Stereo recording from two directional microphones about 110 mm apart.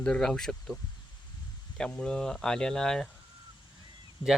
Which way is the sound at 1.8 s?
5° left (ahead or behind).